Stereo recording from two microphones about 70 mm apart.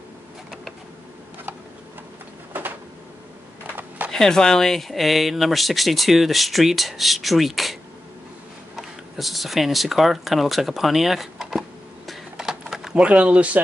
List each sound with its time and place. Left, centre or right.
4.1 s speech: centre
8.7 s speech: centre
12.1 s a sound: centre
12.9 s speech: centre